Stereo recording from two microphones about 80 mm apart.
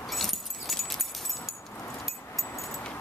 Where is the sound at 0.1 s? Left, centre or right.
Centre.